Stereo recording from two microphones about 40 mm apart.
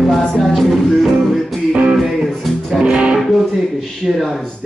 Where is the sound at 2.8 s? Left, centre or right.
Right.